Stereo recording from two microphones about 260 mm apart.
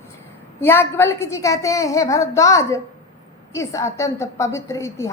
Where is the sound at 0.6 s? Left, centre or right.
Centre.